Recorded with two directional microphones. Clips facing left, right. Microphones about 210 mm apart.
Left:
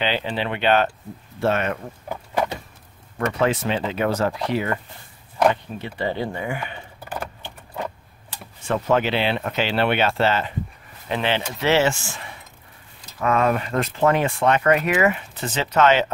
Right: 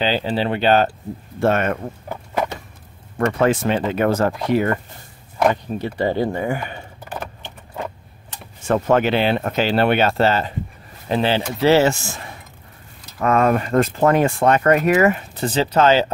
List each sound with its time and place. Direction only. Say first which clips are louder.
0.0 s speech: right 4 dB; 35° right (ahead or behind)
1.4 s speech: right 4 dB; 50° right (ahead or behind)
3.2 s speech: right 4 dB; 50° right (ahead or behind)
7.0 s keys jangling: left 1 dB; 10° left (ahead or behind)
8.6 s speech: right 4 dB; 45° right (ahead or behind)